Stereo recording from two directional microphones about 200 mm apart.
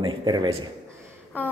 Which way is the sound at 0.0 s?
25° right (ahead or behind).